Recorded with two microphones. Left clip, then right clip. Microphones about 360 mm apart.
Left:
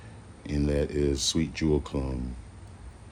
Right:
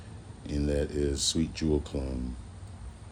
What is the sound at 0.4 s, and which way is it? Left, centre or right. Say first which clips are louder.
Speech: left 2 dB; left.